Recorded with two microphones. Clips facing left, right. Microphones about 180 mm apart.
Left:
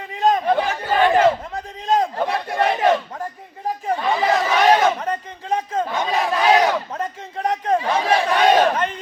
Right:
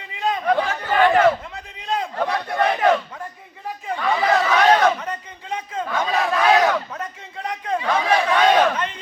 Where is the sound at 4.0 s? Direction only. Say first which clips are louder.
Right 1 dB; 25° left (ahead or behind).